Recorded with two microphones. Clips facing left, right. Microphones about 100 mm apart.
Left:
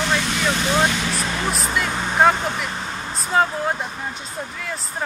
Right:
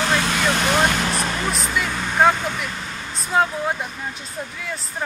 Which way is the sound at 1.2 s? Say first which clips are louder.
Even; centre (ahead or behind).